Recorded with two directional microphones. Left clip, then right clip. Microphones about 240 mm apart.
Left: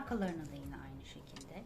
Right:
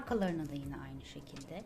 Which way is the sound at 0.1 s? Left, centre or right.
Right.